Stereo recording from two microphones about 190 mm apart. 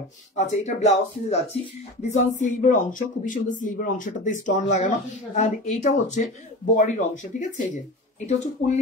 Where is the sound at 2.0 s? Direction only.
40° left (ahead or behind).